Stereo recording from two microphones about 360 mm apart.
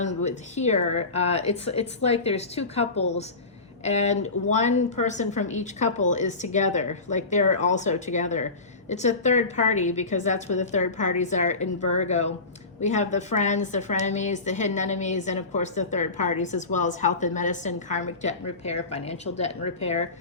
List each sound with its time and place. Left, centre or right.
0.2 s a woman's voice: centre